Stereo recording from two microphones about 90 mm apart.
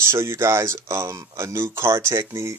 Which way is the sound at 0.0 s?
30° right (ahead or behind).